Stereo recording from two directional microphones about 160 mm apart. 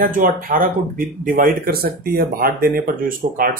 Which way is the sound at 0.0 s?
60° right (ahead or behind).